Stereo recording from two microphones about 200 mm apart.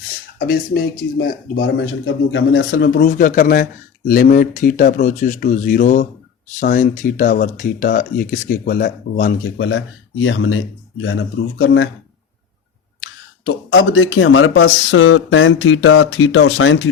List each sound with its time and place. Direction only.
0.3 s speech: 50° left (ahead or behind)
1.5 s speech: 75° left (ahead or behind)
2.7 s speech: 55° left (ahead or behind)
9.4 s speech: 75° left (ahead or behind)
13.4 s speech: 90° left